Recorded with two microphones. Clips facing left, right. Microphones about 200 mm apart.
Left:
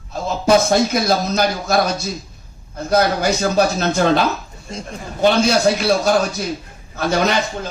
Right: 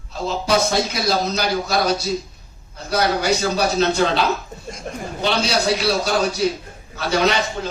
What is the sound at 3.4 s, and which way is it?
Speech, 50° left (ahead or behind).